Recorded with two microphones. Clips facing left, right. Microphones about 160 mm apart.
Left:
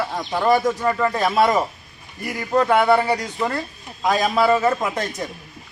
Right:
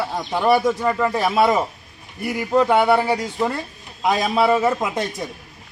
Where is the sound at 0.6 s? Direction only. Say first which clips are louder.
Right 1 dB; 5° right (ahead or behind); by 4.5 s 20° right (ahead or behind).